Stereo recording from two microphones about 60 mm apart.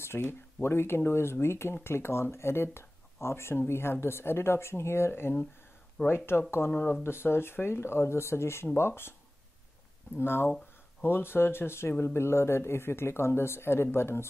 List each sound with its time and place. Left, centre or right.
0.2 s speech: left
10.1 s speech: left